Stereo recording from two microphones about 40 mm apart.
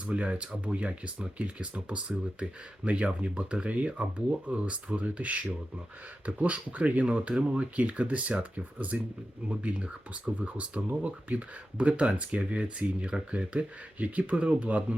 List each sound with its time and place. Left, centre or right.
0.0 s speech: right